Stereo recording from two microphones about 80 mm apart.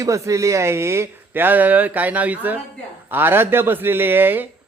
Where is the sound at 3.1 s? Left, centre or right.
Right.